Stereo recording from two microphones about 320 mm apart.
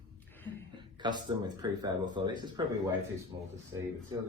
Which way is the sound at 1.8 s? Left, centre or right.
Centre.